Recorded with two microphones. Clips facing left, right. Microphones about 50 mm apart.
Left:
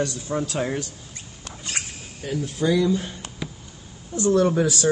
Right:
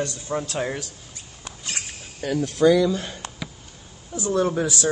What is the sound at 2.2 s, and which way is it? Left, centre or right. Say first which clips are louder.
Speech: right 6 dB; right.